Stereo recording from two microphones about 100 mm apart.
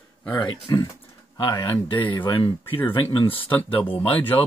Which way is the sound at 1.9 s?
20° left (ahead or behind).